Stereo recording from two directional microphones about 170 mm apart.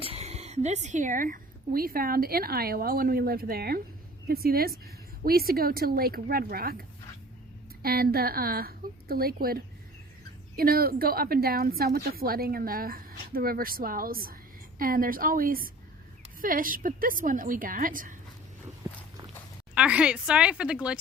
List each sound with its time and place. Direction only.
0.0 s a woman's voice: 35° right (ahead or behind); by 18.2 s 55° right (ahead or behind)
19.7 s speech: 5° right (ahead or behind)